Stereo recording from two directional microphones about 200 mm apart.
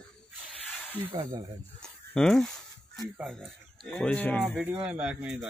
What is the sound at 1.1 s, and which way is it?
Speech, 25° right (ahead or behind).